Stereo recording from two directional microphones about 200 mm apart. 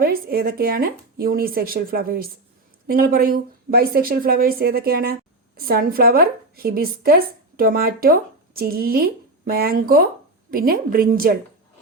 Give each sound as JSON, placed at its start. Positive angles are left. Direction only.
{"t": 0.0, "sound": "a woman's voice", "side_deg": -50}